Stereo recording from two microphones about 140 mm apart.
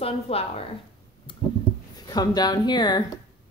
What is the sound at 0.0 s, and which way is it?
Speech, 45° left (ahead or behind).